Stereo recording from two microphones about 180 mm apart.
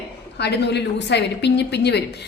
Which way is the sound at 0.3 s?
70° left (ahead or behind).